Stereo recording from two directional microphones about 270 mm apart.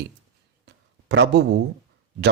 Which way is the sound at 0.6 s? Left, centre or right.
Right.